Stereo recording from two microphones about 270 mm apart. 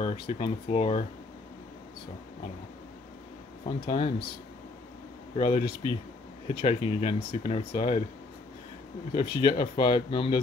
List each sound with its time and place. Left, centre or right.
0.0 s speech: centre
3.6 s speech: centre
5.3 s speech: centre
9.1 s speech: centre